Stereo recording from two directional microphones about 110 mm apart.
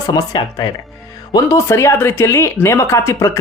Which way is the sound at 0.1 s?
35° left (ahead or behind).